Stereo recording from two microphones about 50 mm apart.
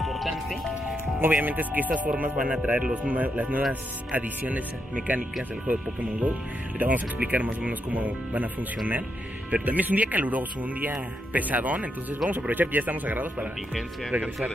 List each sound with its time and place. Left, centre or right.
0.0 s speech: centre
1.2 s speech: right
2.4 s speech: right
3.1 s speech: right
9.5 s speech: right